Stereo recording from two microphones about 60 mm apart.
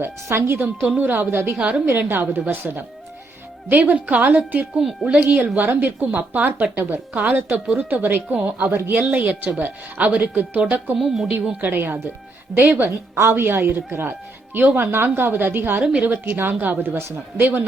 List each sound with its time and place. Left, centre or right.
0.0 s speech: right
0.9 s speech: right
1.5 s a woman's voice: centre
1.9 s speech: right
4.2 s speech: right
4.8 s speech: centre
5.0 s speech: centre
10.9 s speech: centre
11.6 s speech: right
13.1 s speech: right
15.8 s a woman's voice: centre
16.0 s speech: right